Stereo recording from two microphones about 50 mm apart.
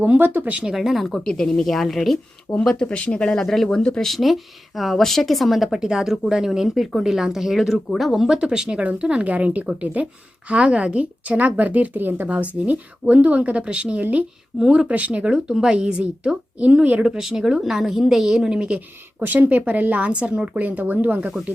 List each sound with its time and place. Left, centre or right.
0.0 s speech: right
0.6 s a woman's voice: centre
1.0 s speech: centre
2.6 s speech: centre
3.4 s a woman's voice: centre
4.1 s a woman's voice: centre
8.3 s a woman's voice: centre; by 12.3 s right
12.3 s a woman's voice: right
14.6 s a woman's voice: centre
15.4 s a woman's voice: centre; by 17.1 s right
17.1 s a woman's voice: centre
19.2 s speech: right